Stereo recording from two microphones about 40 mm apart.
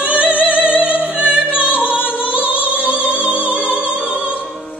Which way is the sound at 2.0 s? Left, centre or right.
Left.